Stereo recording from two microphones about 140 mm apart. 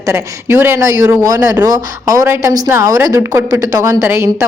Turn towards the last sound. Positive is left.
turn(degrees=-20)  # may be behind; listen again after turning